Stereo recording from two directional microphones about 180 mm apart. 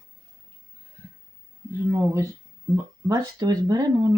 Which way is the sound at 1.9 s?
15° right (ahead or behind).